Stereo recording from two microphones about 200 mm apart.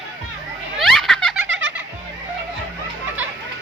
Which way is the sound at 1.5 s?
65° right (ahead or behind).